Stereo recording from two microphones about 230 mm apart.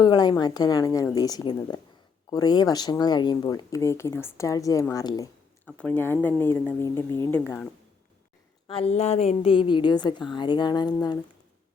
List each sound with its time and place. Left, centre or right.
0.0 s speech: centre
8.6 s a woman's voice: left